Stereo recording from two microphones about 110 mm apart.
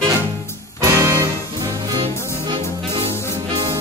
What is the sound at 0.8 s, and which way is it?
Music, 25° right (ahead or behind).